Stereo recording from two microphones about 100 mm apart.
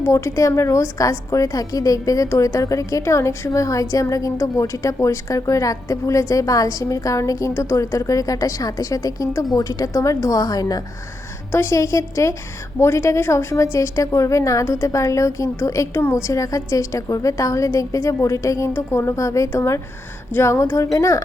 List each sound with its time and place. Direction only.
0.0 s a woman's voice: 30° left (ahead or behind)
11.5 s a woman's voice: 30° left (ahead or behind)